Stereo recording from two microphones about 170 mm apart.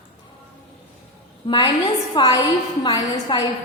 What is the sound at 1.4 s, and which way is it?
A woman's voice, 30° left (ahead or behind).